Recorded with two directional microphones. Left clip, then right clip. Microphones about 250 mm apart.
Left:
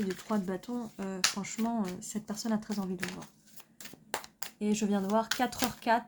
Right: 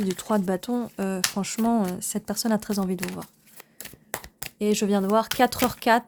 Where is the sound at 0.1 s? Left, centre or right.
Right.